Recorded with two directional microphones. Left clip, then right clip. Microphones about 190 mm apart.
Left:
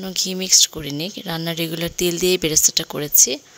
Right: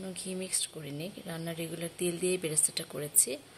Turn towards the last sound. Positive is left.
turn(degrees=45)  # may be behind; listen again after turning